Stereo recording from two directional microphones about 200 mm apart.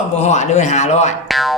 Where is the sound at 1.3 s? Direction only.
Centre (ahead or behind).